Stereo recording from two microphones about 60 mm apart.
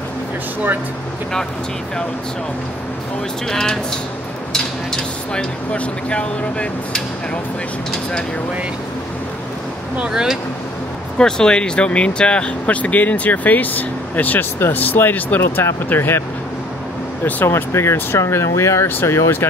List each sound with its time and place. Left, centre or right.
3.4 s speech: centre
4.9 s speech: centre
9.9 s speech: centre
11.1 s speech: centre; by 18.9 s left
18.9 s speech: left